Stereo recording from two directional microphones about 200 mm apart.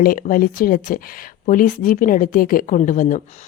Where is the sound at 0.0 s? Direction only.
45° left (ahead or behind).